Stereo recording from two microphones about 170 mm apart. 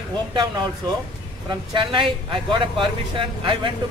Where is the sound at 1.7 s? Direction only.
30° right (ahead or behind).